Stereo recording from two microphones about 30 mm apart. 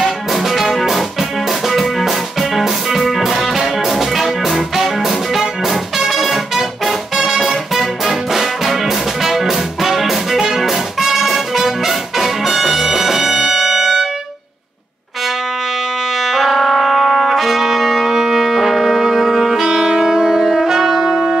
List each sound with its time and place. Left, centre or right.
0.0 s music: centre
16.2 s trumpet: centre
19.7 s saxophone: centre
20.2 s brass instrument: centre